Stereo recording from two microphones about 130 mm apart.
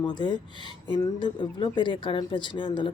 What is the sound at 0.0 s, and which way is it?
Speech, 35° left (ahead or behind).